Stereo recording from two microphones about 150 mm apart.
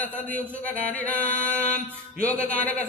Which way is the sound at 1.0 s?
10° left (ahead or behind).